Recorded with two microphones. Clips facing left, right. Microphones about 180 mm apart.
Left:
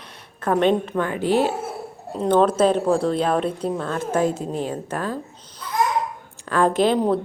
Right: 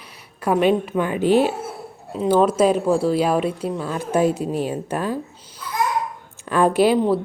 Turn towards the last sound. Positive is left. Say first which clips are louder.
# right 2 dB
turn(degrees=-10)  # may be behind; listen again after turning